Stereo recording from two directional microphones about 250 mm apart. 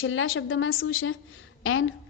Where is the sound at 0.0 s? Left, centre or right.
Left.